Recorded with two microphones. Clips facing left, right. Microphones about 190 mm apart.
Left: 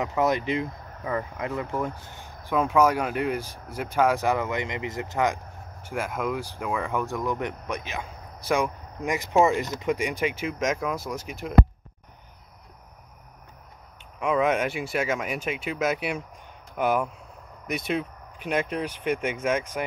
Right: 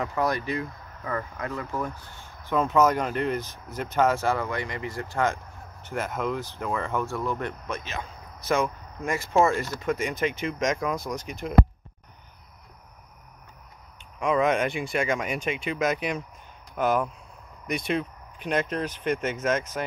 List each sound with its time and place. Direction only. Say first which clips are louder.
0.0 s speech: left 3 dB; 20° left (ahead or behind); by 11.5 s 5° left (ahead or behind)
14.2 s speech: even; 5° left (ahead or behind)